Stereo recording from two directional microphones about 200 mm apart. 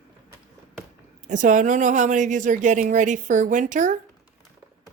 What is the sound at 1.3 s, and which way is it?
Speech, 40° right (ahead or behind).